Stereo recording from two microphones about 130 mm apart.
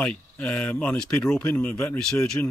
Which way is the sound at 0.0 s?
5° left (ahead or behind).